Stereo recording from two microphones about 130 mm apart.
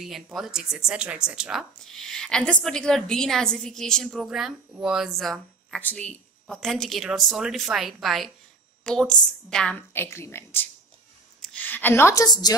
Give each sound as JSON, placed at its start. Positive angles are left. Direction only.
{"t": 0.0, "sound": "a woman's voice", "side_deg": 0}
{"t": 9.9, "sound": "a woman's voice", "side_deg": 20}